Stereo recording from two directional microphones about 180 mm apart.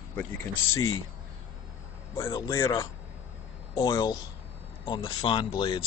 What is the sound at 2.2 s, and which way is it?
Speech, 15° left (ahead or behind).